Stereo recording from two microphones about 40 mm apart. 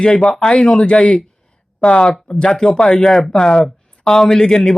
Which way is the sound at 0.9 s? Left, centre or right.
Left.